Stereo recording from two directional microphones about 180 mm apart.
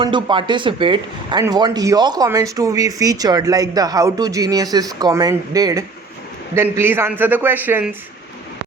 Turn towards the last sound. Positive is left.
turn(degrees=-10)  # may be behind; listen again after turning